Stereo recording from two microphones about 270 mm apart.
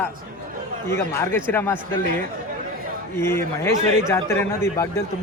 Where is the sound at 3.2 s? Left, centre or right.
Centre.